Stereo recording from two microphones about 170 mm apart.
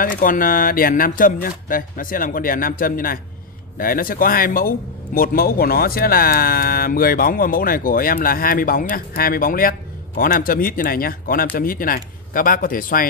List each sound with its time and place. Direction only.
0.0 s a man's voice: 55° left (ahead or behind)